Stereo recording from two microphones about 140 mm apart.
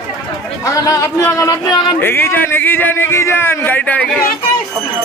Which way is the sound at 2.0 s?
15° left (ahead or behind).